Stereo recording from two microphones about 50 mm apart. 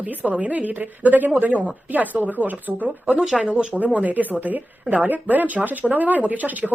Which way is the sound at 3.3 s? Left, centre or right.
Centre.